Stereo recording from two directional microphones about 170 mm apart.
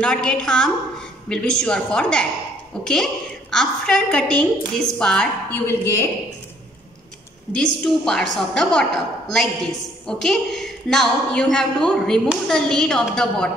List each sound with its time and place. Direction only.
0.0 s a woman's voice: 5° left (ahead or behind)
7.5 s a woman's voice: 5° left (ahead or behind)